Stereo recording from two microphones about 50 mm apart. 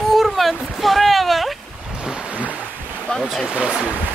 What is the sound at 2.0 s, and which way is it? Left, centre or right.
Waves, centre.